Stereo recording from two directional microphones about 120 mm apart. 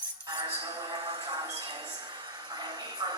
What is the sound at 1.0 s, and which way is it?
Train, 50° right (ahead or behind).